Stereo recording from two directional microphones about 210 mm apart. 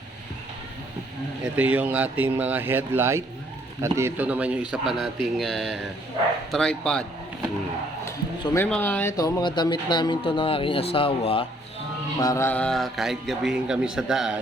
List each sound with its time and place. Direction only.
1.5 s speech: 5° right (ahead or behind)
8.5 s speech: 10° left (ahead or behind); by 11.4 s 25° left (ahead or behind)
12.2 s speech: 15° left (ahead or behind); by 14.3 s centre (ahead or behind)